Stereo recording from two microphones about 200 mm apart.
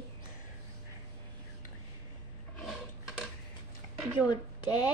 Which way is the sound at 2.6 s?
Centre (ahead or behind).